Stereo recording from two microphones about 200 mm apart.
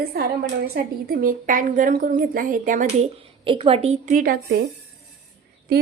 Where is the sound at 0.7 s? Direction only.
50° right (ahead or behind).